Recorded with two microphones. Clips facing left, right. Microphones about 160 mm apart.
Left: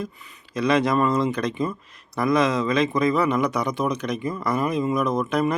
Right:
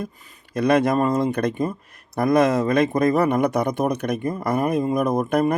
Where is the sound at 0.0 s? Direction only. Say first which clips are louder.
Right 1 dB; 55° right (ahead or behind).